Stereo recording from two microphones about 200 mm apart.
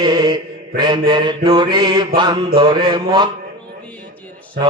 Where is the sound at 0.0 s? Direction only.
20° right (ahead or behind).